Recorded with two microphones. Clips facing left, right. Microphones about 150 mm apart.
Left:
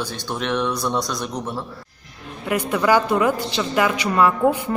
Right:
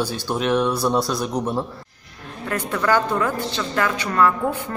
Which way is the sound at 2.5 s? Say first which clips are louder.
Left 3 dB; 10° left (ahead or behind).